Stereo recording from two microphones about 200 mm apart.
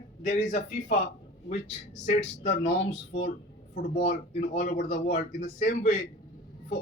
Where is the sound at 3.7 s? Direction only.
40° left (ahead or behind).